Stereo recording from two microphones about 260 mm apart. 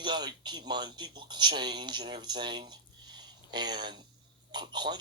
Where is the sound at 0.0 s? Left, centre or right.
Centre.